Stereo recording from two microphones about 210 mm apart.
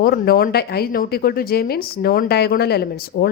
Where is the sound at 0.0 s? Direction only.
45° left (ahead or behind).